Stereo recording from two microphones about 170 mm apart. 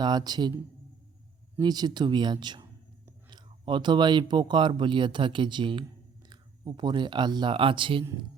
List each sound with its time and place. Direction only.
0.0 s speech: 25° right (ahead or behind)